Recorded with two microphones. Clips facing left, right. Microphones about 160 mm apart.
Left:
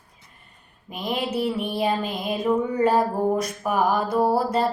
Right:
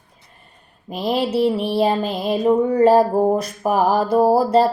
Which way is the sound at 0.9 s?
35° right (ahead or behind).